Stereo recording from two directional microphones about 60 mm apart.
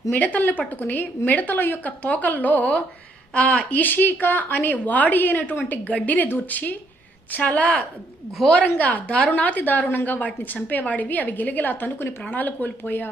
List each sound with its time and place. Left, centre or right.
0.1 s a woman's voice: left